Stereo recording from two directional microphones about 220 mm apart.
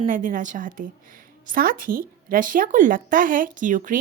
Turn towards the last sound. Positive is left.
turn(degrees=-35)  # may be behind; listen again after turning